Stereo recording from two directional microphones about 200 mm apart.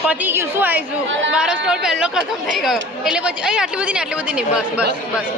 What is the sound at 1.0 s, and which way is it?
Speech, 65° right (ahead or behind).